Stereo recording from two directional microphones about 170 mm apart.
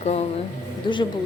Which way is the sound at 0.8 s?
30° left (ahead or behind).